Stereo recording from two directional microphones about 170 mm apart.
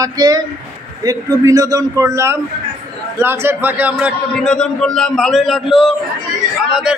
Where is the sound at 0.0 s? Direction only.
20° right (ahead or behind).